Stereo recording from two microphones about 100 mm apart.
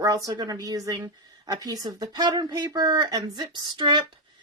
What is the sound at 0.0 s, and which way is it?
A woman's voice, 40° right (ahead or behind).